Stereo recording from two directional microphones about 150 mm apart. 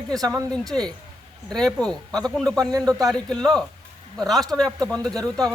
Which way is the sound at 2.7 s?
25° right (ahead or behind).